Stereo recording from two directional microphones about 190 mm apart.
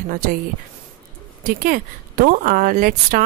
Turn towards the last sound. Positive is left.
turn(degrees=-45)  # may be behind; listen again after turning